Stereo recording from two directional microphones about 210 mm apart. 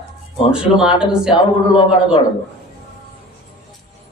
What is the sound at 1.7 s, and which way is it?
Speech, 25° left (ahead or behind).